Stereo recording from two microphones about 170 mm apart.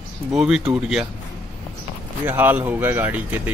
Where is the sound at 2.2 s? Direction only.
10° right (ahead or behind).